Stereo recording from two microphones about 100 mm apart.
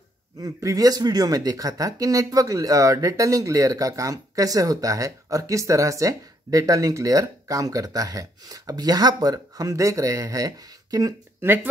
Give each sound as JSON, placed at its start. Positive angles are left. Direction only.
{"t": 0.4, "sound": "speech", "side_deg": -35}
{"t": 11.4, "sound": "speech", "side_deg": -20}